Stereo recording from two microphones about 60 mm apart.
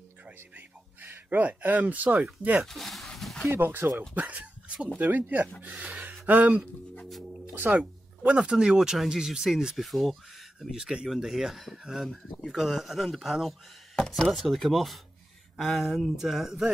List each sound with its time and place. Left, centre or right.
0.6 s a sound: right
2.6 s speech: centre
3.4 s speech: right
4.1 s speech: right; by 13.6 s centre
13.9 s speech: centre
14.2 s speech: centre